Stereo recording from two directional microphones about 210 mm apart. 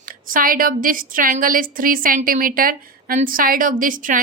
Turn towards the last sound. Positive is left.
turn(degrees=-40)  # may be behind; listen again after turning